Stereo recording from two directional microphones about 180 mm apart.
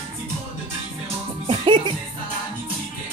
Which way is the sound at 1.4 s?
25° right (ahead or behind).